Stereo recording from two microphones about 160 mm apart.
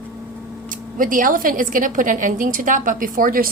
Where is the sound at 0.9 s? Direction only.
60° right (ahead or behind).